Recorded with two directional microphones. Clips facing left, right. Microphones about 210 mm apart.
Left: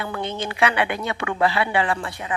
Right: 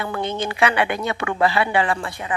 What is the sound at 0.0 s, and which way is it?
A woman's voice, 45° right (ahead or behind).